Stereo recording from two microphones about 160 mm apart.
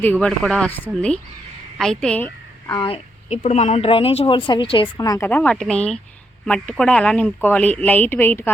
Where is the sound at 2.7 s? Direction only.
30° left (ahead or behind).